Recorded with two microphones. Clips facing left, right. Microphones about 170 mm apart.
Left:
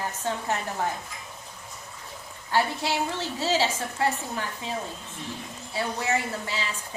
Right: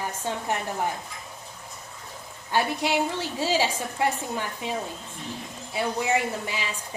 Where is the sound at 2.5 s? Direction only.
15° right (ahead or behind).